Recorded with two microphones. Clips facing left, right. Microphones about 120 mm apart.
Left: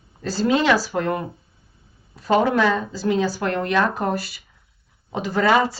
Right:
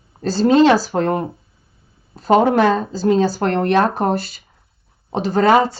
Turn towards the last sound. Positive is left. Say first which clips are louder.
# right 5 dB
turn(degrees=-40)  # may be behind; listen again after turning